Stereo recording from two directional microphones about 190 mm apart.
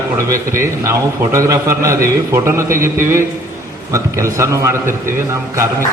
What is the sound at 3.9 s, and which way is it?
A man's voice, 15° right (ahead or behind).